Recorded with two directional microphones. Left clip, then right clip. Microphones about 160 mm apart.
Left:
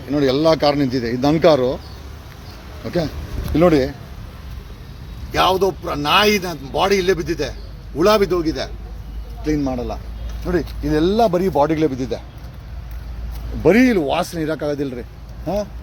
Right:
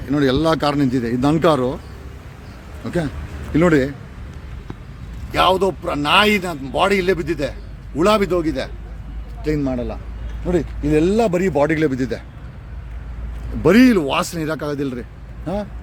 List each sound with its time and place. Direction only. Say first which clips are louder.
0.1 s a man's voice: left 2 dB; 25° right (ahead or behind)
2.8 s a man's voice: left 1 dB; 15° right (ahead or behind)
5.3 s a man's voice: even; 10° right (ahead or behind)
13.6 s a man's voice: right 1 dB; 10° right (ahead or behind)